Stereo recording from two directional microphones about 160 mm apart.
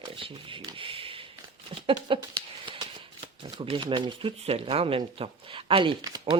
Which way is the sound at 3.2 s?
30° right (ahead or behind).